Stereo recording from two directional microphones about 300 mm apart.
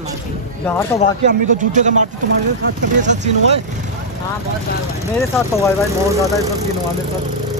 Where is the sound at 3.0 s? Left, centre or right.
Right.